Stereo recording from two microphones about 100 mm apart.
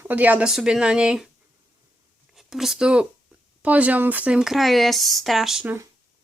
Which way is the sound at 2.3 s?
5° right (ahead or behind).